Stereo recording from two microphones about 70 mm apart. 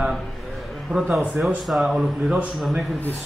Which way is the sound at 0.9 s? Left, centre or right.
Centre.